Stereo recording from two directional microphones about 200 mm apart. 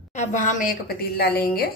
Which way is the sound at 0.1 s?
35° left (ahead or behind).